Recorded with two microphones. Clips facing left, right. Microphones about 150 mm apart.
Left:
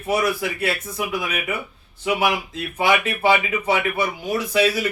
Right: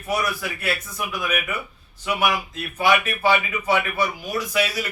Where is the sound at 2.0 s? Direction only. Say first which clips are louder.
Left 2 dB; 30° left (ahead or behind).